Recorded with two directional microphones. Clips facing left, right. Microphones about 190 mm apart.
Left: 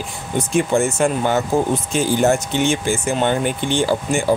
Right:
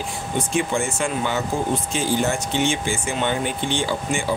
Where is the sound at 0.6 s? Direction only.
40° left (ahead or behind).